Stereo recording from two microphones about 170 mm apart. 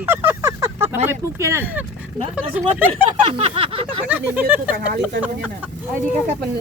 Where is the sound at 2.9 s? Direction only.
30° right (ahead or behind).